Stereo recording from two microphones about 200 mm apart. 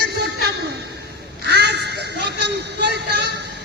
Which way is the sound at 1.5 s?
55° right (ahead or behind).